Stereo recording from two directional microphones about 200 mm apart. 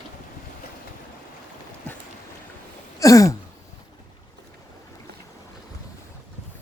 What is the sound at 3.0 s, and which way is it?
Throat clearing, 15° left (ahead or behind).